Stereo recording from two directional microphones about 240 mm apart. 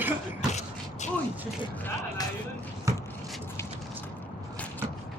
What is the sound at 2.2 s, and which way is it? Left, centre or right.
Music, centre.